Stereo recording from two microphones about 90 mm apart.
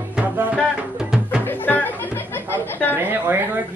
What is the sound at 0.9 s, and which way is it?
Music, 5° right (ahead or behind).